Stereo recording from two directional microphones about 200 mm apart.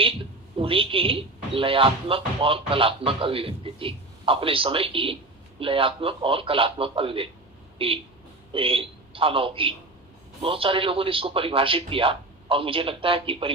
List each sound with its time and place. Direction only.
0.6 s a man's voice: 25° right (ahead or behind)